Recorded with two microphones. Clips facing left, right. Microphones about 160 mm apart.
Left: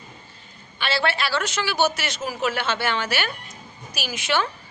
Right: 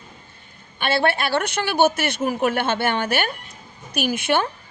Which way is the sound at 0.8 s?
55° right (ahead or behind).